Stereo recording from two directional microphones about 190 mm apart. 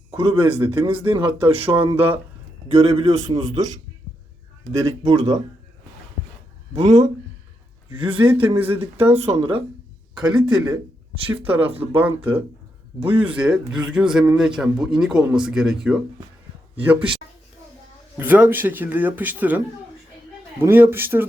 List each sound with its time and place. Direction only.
0.1 s speech: 30° right (ahead or behind)
3.2 s speech: 20° right (ahead or behind)
6.7 s speech: 35° right (ahead or behind)
8.8 s speech: 10° right (ahead or behind)
9.1 s speech: 30° right (ahead or behind)
11.9 s a man's voice: 10° right (ahead or behind)
18.2 s speech: 10° right (ahead or behind)